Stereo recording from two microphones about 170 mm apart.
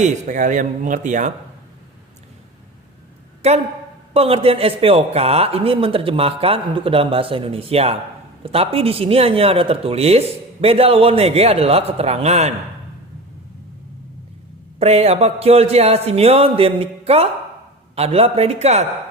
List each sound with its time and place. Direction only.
0.0 s speech: 45° right (ahead or behind)
3.4 s speech: 40° right (ahead or behind)
14.8 s speech: 35° right (ahead or behind)